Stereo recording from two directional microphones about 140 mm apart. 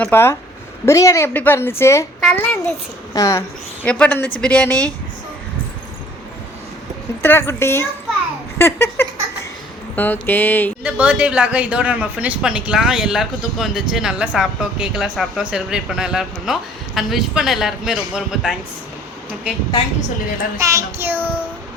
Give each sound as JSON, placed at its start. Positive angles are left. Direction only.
{"t": 0.0, "sound": "a woman's voice", "side_deg": 15}
{"t": 2.2, "sound": "a man's voice", "side_deg": 5}
{"t": 3.1, "sound": "speech", "side_deg": 25}
{"t": 3.8, "sound": "speech", "side_deg": 10}
{"t": 7.2, "sound": "speech", "side_deg": 15}
{"t": 8.5, "sound": "a sound", "side_deg": 15}
{"t": 9.9, "sound": "speech", "side_deg": 10}
{"t": 10.8, "sound": "a man's voice", "side_deg": -10}
{"t": 20.6, "sound": "a child's voice", "side_deg": -20}